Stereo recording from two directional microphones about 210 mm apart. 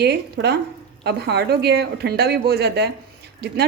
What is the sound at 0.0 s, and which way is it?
A woman's voice, 50° right (ahead or behind).